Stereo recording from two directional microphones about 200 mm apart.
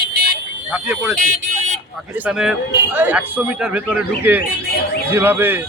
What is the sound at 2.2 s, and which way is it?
Speech, 5° right (ahead or behind).